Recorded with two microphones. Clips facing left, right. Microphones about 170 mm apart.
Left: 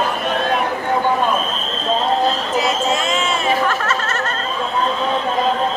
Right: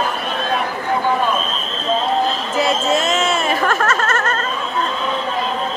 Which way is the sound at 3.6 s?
50° right (ahead or behind).